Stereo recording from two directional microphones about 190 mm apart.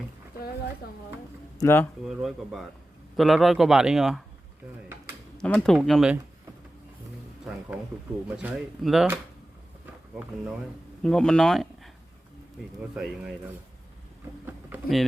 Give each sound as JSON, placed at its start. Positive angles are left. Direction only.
{"t": 1.5, "sound": "speech", "side_deg": 10}
{"t": 2.0, "sound": "speech", "side_deg": 0}
{"t": 5.4, "sound": "speech", "side_deg": 5}
{"t": 8.4, "sound": "speech", "side_deg": -5}
{"t": 11.0, "sound": "speech", "side_deg": 5}
{"t": 12.9, "sound": "speech", "side_deg": -5}
{"t": 14.7, "sound": "vehicle", "side_deg": -10}